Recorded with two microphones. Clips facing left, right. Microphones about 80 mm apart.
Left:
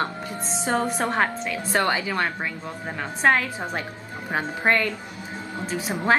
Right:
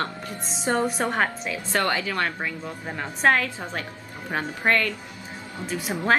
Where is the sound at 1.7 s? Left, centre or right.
Centre.